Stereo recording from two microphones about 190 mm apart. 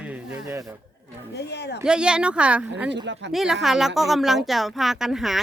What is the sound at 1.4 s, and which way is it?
Speech, 60° left (ahead or behind).